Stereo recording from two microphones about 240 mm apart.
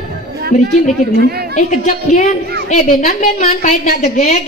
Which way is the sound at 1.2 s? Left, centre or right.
Right.